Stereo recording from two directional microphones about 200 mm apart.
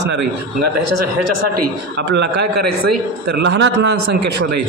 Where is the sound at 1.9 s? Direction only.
60° right (ahead or behind).